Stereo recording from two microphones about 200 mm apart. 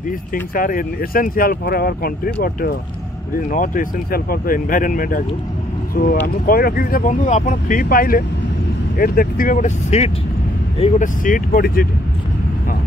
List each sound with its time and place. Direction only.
0.3 s speech: 45° left (ahead or behind)
6.2 s speech: 45° left (ahead or behind)